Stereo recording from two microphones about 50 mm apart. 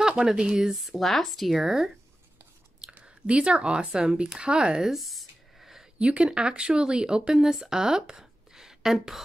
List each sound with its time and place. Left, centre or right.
0.0 s speech: centre
0.8 s speech: centre
2.9 s speech: right
4.9 s a sound: centre
5.9 s speech: right; by 9.2 s centre